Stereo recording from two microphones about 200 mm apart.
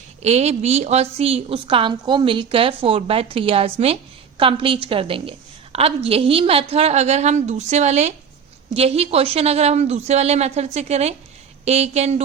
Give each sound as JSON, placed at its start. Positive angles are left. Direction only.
{"t": 0.2, "sound": "a woman's voice", "side_deg": -35}